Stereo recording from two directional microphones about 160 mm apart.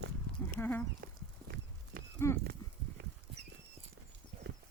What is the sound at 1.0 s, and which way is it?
Horse, 70° right (ahead or behind).